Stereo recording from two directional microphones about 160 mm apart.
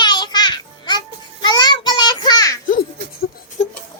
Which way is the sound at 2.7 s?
60° left (ahead or behind).